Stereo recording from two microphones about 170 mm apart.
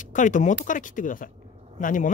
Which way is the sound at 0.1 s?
50° left (ahead or behind).